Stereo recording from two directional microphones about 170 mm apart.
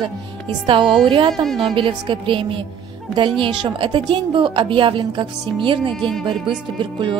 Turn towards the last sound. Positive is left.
turn(degrees=-30)  # may be behind; listen again after turning